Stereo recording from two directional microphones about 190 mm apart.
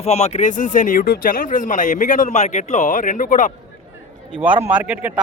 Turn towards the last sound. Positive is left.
turn(degrees=-10)  # may be behind; listen again after turning